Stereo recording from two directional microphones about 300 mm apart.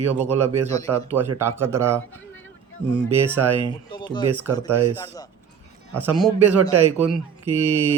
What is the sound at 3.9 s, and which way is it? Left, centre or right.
Speech, centre.